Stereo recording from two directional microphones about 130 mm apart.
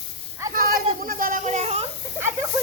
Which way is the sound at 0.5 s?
90° right.